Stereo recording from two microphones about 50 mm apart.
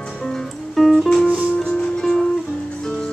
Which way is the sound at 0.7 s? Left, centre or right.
Centre.